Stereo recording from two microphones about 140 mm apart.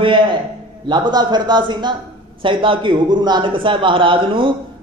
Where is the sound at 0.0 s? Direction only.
35° right (ahead or behind).